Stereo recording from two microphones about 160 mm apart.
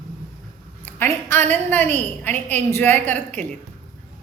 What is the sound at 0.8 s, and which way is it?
A woman's voice, 15° left (ahead or behind).